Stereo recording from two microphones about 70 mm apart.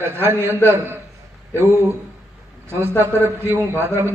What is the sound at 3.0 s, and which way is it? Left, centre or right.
A man's voice, right.